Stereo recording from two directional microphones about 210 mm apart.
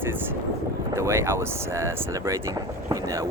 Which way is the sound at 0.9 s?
15° right (ahead or behind).